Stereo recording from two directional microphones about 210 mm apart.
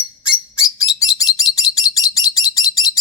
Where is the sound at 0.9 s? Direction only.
15° left (ahead or behind).